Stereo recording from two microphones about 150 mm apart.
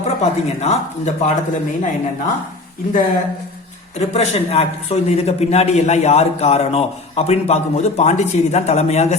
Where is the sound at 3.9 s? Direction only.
45° left (ahead or behind).